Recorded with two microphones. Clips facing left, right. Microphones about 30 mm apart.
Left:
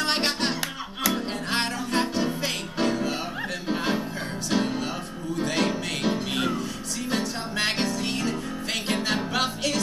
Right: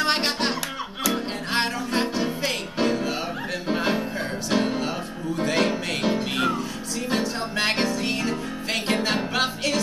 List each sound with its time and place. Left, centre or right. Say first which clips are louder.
0.0 s music: right 2 dB; centre